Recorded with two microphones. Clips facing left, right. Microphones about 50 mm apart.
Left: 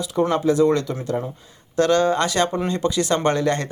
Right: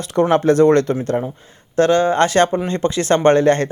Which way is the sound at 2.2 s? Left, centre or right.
Right.